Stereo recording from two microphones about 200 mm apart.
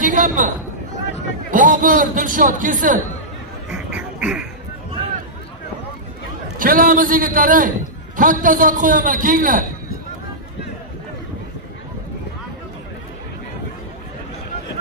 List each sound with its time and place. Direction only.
0.0 s a sound: 40° right (ahead or behind)
1.5 s a man's voice: 40° right (ahead or behind)
3.7 s duck: 5° right (ahead or behind)
6.6 s a man's voice: 45° right (ahead or behind)